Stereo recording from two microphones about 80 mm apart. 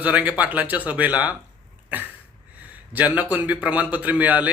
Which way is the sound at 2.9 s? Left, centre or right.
Centre.